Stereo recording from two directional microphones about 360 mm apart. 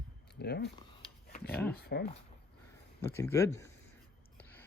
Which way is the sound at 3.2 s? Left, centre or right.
Centre.